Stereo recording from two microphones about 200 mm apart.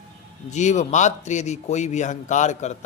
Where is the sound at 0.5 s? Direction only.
35° left (ahead or behind).